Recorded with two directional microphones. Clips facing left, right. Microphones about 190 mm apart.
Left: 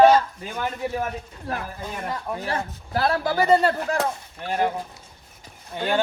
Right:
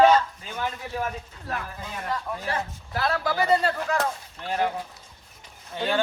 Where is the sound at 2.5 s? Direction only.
45° left (ahead or behind).